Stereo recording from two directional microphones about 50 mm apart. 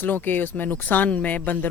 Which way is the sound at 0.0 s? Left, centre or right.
Left.